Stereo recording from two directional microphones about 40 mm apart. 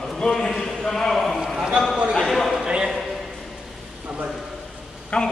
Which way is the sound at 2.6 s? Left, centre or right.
Centre.